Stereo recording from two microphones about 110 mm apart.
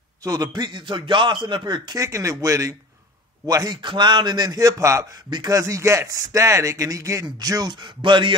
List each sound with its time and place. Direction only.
0.2 s a man's voice: 35° right (ahead or behind)
2.0 s a man's voice: 25° right (ahead or behind); by 8.4 s 50° right (ahead or behind)